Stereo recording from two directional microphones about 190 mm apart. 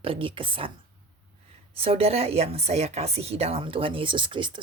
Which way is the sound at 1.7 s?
30° right (ahead or behind).